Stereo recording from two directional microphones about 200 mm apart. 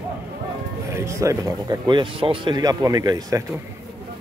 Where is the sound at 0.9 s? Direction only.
15° right (ahead or behind).